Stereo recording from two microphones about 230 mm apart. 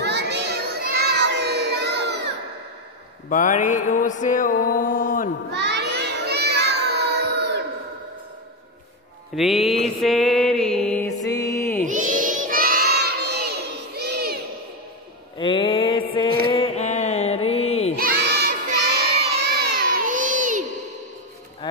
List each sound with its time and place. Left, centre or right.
0.0 s children playing: right
3.3 s music: left
5.5 s crowd: right
9.3 s speech: centre
10.0 s music: centre
11.2 s music: centre
11.8 s crowd: right
13.9 s a sound: right
15.3 s mantra: left
16.4 s a sound: left
17.9 s crowd: right